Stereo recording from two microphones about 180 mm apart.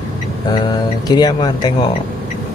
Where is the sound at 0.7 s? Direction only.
20° left (ahead or behind).